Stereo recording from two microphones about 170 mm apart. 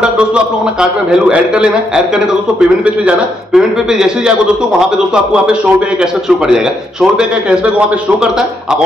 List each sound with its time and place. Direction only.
0.0 s a man's voice: 5° right (ahead or behind)